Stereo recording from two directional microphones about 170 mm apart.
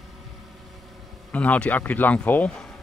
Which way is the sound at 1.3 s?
10° left (ahead or behind).